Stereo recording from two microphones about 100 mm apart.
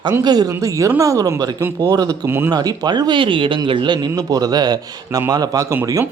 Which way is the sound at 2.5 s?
40° right (ahead or behind).